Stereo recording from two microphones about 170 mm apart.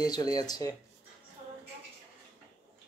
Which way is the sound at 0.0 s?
20° left (ahead or behind).